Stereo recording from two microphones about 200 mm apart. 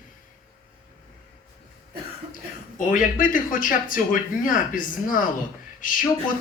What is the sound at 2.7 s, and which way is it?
Speech, 40° left (ahead or behind).